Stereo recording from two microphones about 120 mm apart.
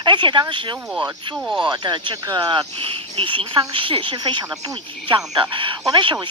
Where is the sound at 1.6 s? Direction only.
40° right (ahead or behind).